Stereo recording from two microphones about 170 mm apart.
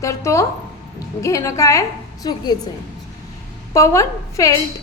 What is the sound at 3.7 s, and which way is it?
Speech, 20° left (ahead or behind).